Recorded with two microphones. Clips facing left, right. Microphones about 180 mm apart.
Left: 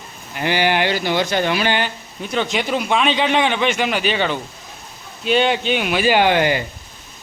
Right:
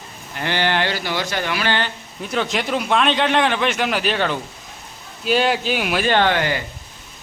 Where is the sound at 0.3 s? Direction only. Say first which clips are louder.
Left 3 dB; 10° left (ahead or behind).